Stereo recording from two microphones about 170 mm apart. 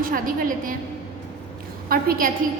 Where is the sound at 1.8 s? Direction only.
60° right (ahead or behind).